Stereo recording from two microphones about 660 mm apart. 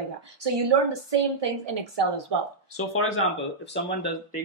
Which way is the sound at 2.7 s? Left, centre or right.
Centre.